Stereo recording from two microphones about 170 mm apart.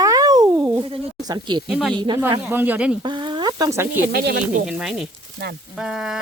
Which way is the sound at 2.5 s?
10° right (ahead or behind).